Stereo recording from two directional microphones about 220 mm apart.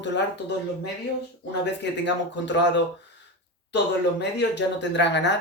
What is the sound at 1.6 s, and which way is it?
Speech, 50° left (ahead or behind).